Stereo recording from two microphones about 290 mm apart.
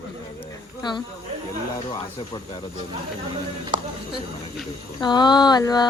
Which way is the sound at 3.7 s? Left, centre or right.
Right.